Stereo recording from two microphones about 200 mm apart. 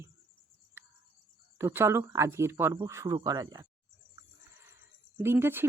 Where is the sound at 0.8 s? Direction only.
10° right (ahead or behind).